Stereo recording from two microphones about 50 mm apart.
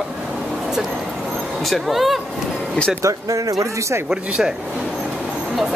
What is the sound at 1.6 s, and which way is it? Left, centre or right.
Speech, centre.